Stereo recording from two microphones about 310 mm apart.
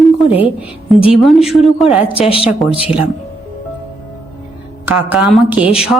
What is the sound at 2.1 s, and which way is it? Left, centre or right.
Speech, centre.